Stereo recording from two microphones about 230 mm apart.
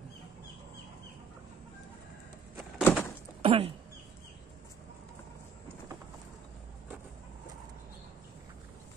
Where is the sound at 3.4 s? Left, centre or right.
Right.